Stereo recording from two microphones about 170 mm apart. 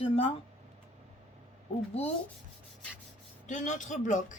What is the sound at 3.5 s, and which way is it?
Speech, 45° left (ahead or behind).